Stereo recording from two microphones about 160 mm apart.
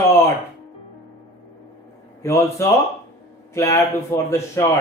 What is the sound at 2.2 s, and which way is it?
A man's voice, 20° left (ahead or behind).